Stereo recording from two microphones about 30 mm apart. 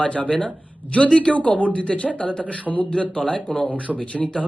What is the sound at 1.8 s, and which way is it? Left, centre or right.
Speech, left.